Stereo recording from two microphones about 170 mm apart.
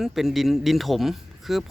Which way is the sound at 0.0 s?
Centre (ahead or behind).